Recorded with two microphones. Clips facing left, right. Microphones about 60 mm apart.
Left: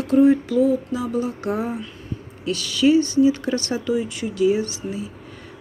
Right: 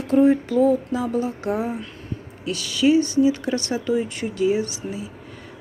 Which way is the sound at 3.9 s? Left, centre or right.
Right.